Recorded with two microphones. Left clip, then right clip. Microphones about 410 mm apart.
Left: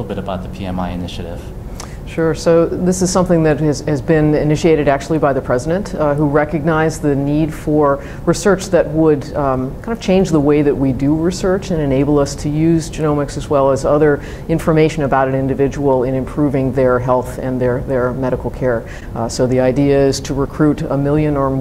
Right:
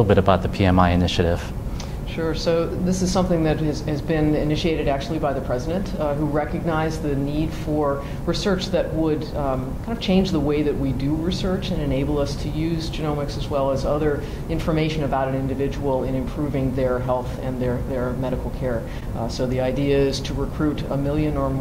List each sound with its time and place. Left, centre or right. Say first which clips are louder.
0.1 s speech: right 6 dB; right
2.1 s a woman's voice: left 9 dB; left